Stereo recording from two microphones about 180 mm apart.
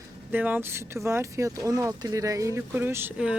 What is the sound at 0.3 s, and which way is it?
Speech, 10° right (ahead or behind).